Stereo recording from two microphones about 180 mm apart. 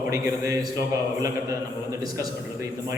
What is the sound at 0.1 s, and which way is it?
Speech, 20° right (ahead or behind).